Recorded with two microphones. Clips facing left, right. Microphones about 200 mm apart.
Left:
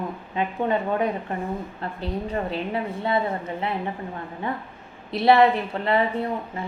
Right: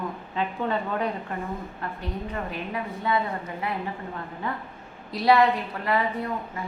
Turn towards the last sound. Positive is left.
turn(degrees=25)  # may be behind; listen again after turning